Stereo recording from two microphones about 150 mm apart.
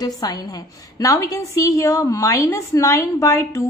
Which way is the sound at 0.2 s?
25° left (ahead or behind).